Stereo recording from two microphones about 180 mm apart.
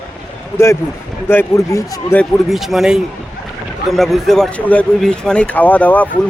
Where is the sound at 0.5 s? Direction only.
15° left (ahead or behind).